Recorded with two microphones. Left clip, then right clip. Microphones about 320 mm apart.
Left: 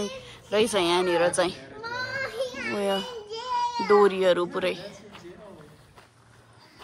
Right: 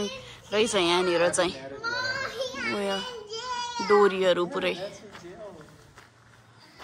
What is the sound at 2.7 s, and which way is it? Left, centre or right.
A woman's voice, centre.